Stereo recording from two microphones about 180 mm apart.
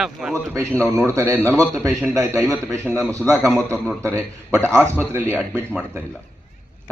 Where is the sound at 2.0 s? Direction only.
15° right (ahead or behind).